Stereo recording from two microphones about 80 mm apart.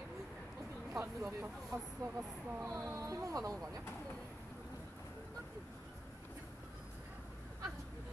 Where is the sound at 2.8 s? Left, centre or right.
Right.